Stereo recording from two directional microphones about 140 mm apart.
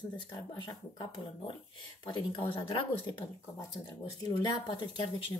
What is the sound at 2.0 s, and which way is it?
Speech, 35° left (ahead or behind).